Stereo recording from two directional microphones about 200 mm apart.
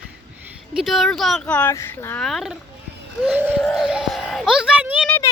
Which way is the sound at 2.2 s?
Centre (ahead or behind).